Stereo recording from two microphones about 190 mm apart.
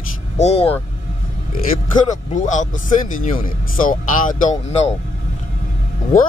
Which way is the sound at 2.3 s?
40° left (ahead or behind).